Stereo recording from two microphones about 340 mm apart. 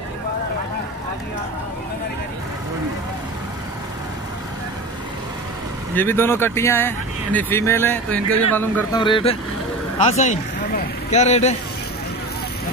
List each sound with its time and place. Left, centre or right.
5.9 s speech: centre